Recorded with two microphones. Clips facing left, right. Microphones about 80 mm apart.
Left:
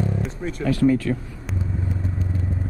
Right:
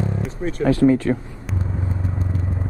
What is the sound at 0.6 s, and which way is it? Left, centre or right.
Speech, right.